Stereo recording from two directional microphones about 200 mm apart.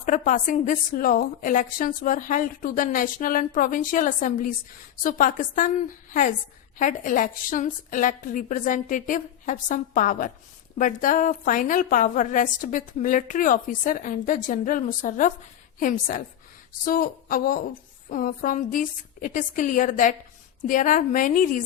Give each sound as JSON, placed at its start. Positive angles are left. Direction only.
{"t": 0.0, "sound": "a woman's voice", "side_deg": 40}
{"t": 6.7, "sound": "a woman's voice", "side_deg": 40}